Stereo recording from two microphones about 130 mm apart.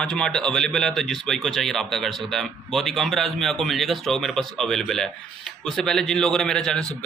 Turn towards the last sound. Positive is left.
turn(degrees=5)  # may be behind; listen again after turning